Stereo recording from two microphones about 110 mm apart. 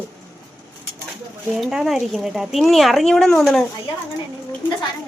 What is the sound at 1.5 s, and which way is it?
A woman's voice, 5° right (ahead or behind).